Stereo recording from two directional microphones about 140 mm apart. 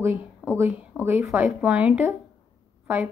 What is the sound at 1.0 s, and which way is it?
A woman's voice, 20° right (ahead or behind).